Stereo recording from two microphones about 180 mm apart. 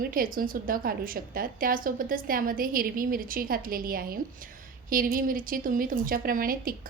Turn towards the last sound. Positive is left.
turn(degrees=-55)  # may be behind; listen again after turning